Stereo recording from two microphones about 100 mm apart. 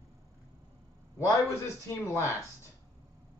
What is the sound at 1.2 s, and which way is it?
Speech, 30° left (ahead or behind).